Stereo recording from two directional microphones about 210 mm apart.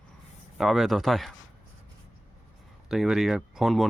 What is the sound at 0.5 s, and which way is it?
Speech, centre (ahead or behind).